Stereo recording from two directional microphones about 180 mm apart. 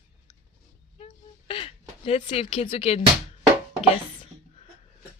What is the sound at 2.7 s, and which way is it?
Speech, 35° left (ahead or behind).